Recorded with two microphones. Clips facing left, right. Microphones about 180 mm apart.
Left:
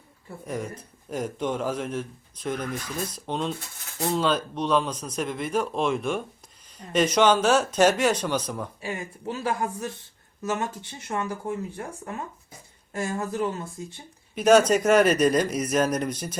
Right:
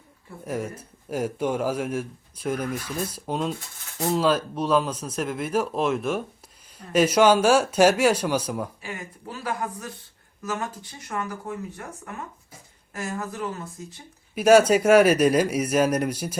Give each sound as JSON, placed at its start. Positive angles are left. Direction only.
{"t": 0.4, "sound": "speech", "side_deg": -5}
{"t": 8.8, "sound": "speech", "side_deg": 25}
{"t": 14.3, "sound": "speech", "side_deg": -10}